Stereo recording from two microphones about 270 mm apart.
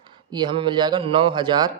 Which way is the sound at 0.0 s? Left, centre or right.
Centre.